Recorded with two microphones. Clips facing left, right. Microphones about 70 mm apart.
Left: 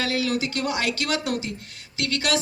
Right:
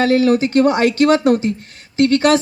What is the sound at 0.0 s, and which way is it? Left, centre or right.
Speech, right.